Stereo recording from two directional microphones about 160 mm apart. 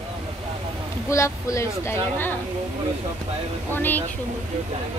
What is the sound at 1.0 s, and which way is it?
Speech, 20° left (ahead or behind).